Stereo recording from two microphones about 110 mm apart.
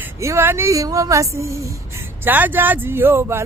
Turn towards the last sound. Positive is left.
turn(degrees=-20)  # may be behind; listen again after turning